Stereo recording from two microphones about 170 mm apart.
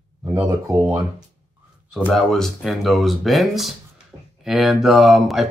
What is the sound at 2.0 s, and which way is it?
Speech, centre (ahead or behind).